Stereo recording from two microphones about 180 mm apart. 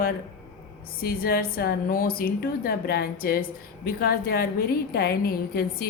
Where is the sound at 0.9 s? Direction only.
55° left (ahead or behind).